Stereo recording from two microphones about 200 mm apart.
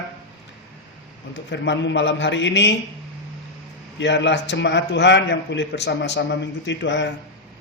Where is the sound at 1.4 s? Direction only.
65° left (ahead or behind).